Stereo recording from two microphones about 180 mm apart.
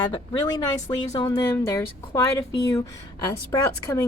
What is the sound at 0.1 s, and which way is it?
Speech, 20° left (ahead or behind).